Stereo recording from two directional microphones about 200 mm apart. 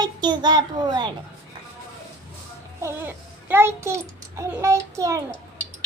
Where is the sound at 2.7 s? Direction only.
10° right (ahead or behind).